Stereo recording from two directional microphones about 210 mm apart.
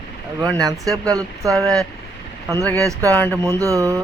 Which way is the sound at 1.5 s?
Centre (ahead or behind).